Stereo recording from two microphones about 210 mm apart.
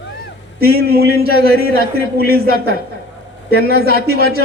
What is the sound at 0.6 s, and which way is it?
A man's voice, 45° right (ahead or behind).